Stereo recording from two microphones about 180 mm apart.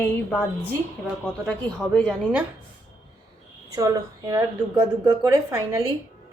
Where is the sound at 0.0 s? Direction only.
5° left (ahead or behind).